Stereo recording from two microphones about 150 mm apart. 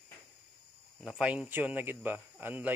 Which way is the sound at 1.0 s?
5° right (ahead or behind).